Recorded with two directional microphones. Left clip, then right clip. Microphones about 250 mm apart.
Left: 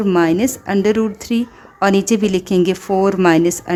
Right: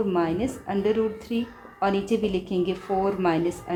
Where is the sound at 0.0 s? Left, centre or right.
Left.